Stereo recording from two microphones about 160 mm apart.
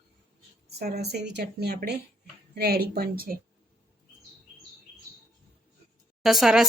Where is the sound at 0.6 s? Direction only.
85° right; by 3.4 s 65° right (ahead or behind).